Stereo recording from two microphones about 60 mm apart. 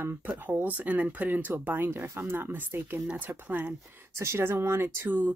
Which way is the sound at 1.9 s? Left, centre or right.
Right.